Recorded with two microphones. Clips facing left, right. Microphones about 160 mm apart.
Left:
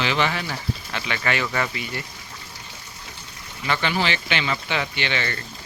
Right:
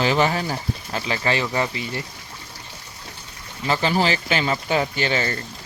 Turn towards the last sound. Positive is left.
turn(degrees=-40)  # may be behind; listen again after turning